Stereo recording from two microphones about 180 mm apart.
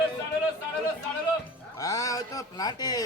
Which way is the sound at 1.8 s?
20° left (ahead or behind).